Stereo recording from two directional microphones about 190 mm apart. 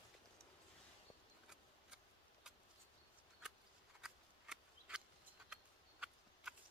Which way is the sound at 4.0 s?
5° right (ahead or behind).